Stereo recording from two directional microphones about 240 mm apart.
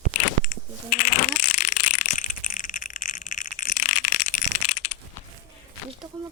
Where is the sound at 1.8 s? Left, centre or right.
Left.